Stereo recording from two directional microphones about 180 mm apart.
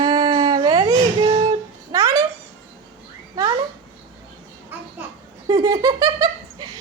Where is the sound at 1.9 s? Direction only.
20° right (ahead or behind).